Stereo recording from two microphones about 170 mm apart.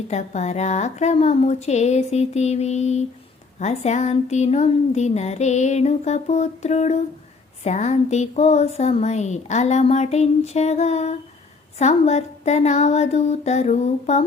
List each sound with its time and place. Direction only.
0.1 s speech: 40° left (ahead or behind)